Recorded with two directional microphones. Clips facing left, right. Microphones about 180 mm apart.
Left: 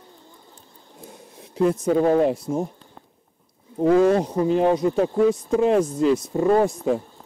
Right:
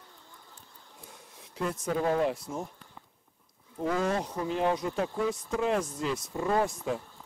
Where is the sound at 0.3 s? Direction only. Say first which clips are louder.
Left 5 dB; 25° left (ahead or behind).